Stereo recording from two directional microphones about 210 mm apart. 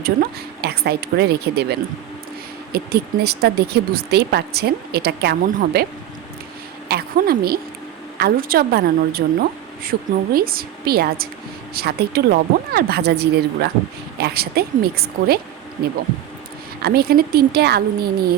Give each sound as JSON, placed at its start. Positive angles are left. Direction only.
{"t": 0.0, "sound": "speech", "side_deg": -50}
{"t": 2.7, "sound": "speech", "side_deg": -50}
{"t": 6.8, "sound": "a sound", "side_deg": -45}
{"t": 8.2, "sound": "speech", "side_deg": -45}
{"t": 16.8, "sound": "speech", "side_deg": -45}